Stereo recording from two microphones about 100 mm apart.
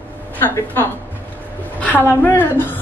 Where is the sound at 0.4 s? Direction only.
20° left (ahead or behind).